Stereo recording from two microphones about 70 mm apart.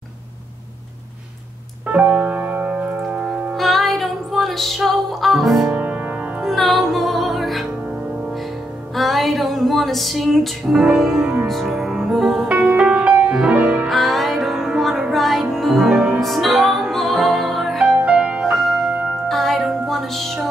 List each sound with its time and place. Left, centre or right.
1.9 s piano: right
3.0 s music: centre
3.5 s music: centre
5.7 s music: right
6.4 s music: centre
8.9 s music: centre
12.4 s music: right
13.8 s music: centre
18.0 s music: centre
18.4 s music: centre